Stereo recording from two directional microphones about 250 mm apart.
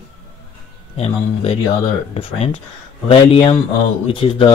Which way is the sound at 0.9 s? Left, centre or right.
Left.